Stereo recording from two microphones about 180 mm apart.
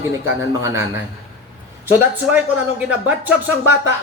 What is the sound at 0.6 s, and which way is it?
Speech, 15° right (ahead or behind).